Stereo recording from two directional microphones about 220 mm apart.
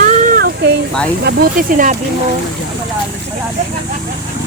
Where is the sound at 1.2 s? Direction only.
40° right (ahead or behind).